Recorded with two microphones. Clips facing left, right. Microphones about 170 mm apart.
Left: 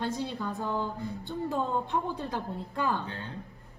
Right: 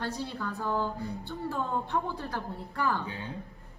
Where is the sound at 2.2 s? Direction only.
20° left (ahead or behind).